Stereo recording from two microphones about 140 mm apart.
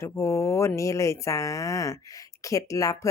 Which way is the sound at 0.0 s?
20° left (ahead or behind).